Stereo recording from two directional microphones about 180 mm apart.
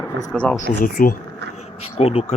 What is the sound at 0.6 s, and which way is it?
Speech, 50° left (ahead or behind).